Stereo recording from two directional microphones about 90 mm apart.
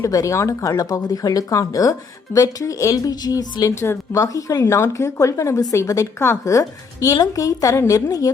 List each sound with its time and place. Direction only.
0.0 s speech: 35° left (ahead or behind)